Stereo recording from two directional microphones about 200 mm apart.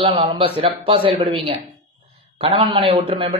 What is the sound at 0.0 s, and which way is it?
Speech, 30° right (ahead or behind).